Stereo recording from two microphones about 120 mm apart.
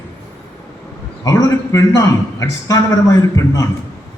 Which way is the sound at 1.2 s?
30° left (ahead or behind).